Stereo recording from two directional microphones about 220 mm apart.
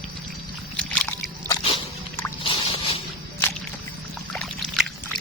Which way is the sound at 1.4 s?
20° left (ahead or behind).